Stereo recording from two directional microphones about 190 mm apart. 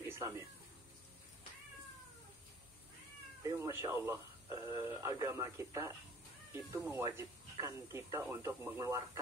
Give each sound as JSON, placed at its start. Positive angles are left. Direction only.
{"t": 3.4, "sound": "speech", "side_deg": -15}